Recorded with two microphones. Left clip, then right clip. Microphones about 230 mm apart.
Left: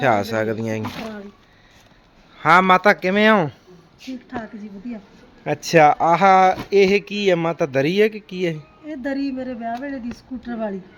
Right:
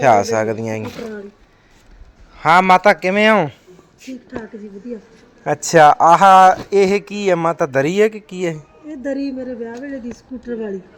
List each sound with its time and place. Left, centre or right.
0.0 s speech: centre
2.3 s speech: centre
5.4 s speech: centre
8.9 s speech: left